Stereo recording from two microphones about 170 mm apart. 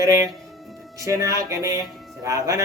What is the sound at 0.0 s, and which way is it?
A man's voice, 20° right (ahead or behind).